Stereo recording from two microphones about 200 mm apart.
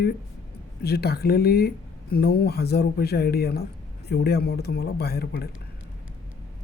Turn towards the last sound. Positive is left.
turn(degrees=50)  # may be behind; listen again after turning